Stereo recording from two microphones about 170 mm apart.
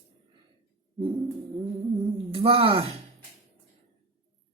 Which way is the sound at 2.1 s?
30° right (ahead or behind).